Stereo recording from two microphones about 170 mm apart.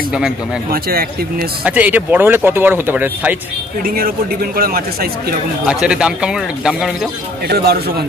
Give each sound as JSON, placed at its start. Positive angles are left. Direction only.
{"t": 0.7, "sound": "speech", "side_deg": -65}
{"t": 1.6, "sound": "speech", "side_deg": -10}
{"t": 3.8, "sound": "speech", "side_deg": -60}
{"t": 5.7, "sound": "a man's voice", "side_deg": -5}
{"t": 7.4, "sound": "a man's voice", "side_deg": -70}